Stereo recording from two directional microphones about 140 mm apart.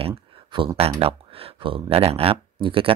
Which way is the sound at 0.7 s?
45° right (ahead or behind).